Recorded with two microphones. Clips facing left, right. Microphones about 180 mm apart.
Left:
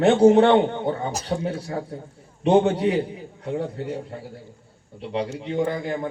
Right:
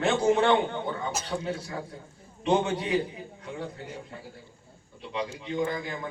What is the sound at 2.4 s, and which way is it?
A man's voice, 55° left (ahead or behind).